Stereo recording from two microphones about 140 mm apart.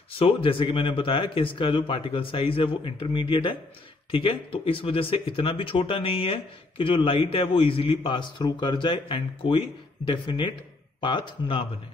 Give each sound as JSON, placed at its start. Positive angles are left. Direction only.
{"t": 0.2, "sound": "speech", "side_deg": 40}